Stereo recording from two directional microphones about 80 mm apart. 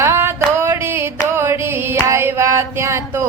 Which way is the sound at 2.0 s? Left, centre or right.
Right.